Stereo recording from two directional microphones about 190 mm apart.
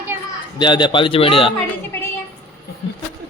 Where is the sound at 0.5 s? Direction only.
25° left (ahead or behind).